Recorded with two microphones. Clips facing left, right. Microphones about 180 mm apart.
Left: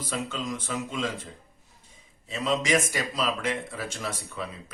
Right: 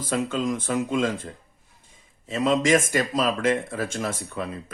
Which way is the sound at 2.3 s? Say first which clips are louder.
Right 5 dB; 50° right (ahead or behind).